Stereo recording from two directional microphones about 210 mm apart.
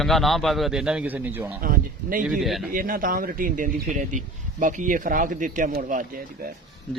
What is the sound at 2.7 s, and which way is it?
Speech, 40° right (ahead or behind).